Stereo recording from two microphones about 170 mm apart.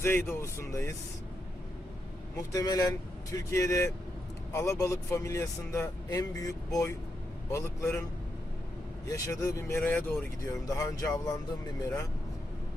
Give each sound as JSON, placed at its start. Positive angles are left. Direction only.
{"t": 0.0, "sound": "speech", "side_deg": 15}
{"t": 2.5, "sound": "speech", "side_deg": 20}
{"t": 9.0, "sound": "speech", "side_deg": 20}